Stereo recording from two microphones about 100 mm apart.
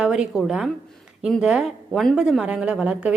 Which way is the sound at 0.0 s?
5° right (ahead or behind).